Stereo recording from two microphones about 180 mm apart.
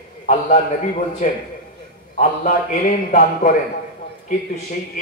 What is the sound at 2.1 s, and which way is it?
A man's voice, 45° left (ahead or behind).